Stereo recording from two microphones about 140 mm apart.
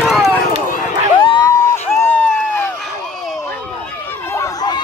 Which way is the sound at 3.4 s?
15° left (ahead or behind).